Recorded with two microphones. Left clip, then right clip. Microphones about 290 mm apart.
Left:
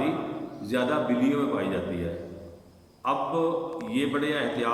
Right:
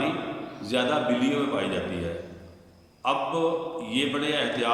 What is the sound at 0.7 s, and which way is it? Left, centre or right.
A man's voice, centre.